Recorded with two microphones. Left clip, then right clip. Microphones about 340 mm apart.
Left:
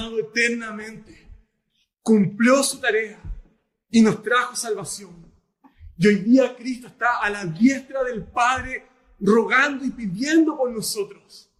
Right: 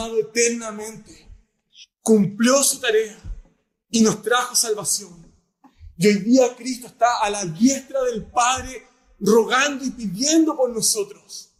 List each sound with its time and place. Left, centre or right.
0.2 s speech: centre